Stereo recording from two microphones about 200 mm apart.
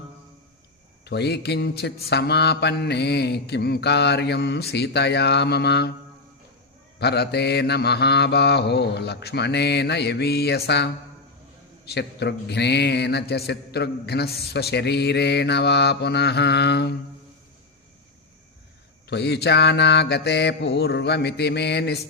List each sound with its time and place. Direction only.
1.0 s speech: 55° left (ahead or behind)
7.0 s speech: 55° left (ahead or behind)
19.0 s speech: 55° left (ahead or behind)